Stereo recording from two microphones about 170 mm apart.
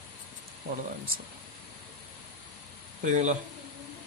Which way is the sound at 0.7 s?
60° right (ahead or behind).